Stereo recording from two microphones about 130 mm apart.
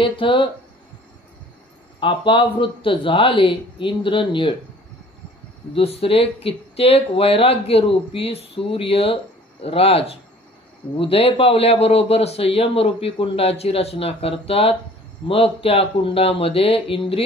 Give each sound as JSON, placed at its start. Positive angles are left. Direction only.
{"t": 0.0, "sound": "speech", "side_deg": 40}
{"t": 2.0, "sound": "speech", "side_deg": 40}
{"t": 5.8, "sound": "speech", "side_deg": 50}